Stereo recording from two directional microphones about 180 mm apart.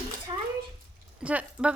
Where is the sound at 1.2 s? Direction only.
5° right (ahead or behind).